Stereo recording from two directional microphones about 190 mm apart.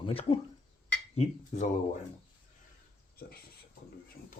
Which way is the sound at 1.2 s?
40° left (ahead or behind).